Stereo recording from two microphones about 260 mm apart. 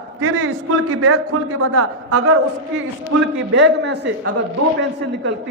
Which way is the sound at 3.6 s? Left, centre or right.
Right.